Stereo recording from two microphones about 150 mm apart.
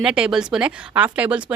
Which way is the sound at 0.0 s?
5° right (ahead or behind).